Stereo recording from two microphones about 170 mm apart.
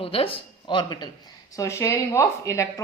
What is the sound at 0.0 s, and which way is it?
A woman's voice, 30° left (ahead or behind).